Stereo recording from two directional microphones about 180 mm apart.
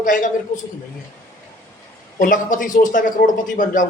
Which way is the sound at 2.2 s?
50° left (ahead or behind).